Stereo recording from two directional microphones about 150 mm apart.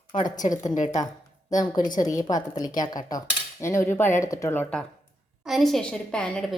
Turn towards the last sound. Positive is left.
turn(degrees=5)  # may be behind; listen again after turning